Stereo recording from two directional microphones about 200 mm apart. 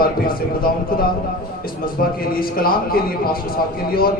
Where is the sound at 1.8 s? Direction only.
45° left (ahead or behind).